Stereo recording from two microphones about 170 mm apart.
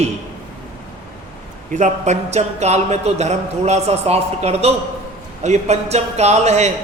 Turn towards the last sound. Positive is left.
turn(degrees=-40)  # may be behind; listen again after turning